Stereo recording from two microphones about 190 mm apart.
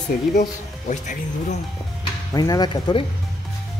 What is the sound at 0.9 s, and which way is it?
Speech, 40° left (ahead or behind).